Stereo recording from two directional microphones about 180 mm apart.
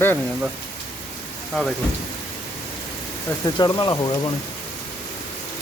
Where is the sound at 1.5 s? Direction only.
Centre (ahead or behind).